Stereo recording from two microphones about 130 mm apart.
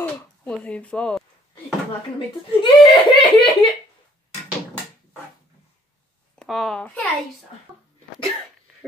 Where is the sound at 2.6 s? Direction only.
40° left (ahead or behind).